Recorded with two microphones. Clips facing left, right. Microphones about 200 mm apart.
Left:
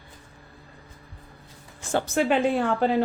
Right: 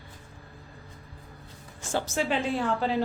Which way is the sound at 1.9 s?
55° left (ahead or behind).